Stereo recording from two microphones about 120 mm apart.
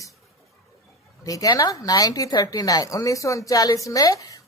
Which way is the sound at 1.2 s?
30° left (ahead or behind).